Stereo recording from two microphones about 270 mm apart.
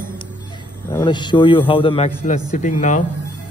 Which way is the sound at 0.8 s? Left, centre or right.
Centre.